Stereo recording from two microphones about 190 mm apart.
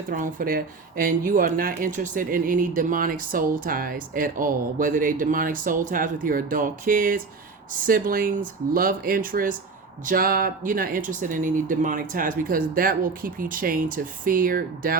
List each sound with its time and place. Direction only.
0.1 s speech: 45° right (ahead or behind)